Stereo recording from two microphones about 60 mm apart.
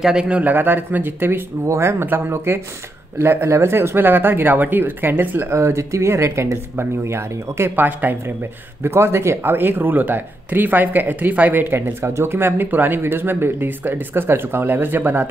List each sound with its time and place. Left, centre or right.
0.0 s speech: centre; by 1.4 s right
1.7 s speech: right
5.5 s speech: right
7.7 s speech: right
8.8 s speech: right
11.6 s speech: right